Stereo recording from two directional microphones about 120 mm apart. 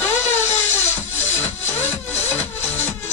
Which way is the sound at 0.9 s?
20° left (ahead or behind).